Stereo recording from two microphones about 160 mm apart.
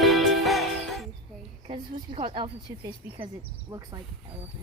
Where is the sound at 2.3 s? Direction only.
30° right (ahead or behind).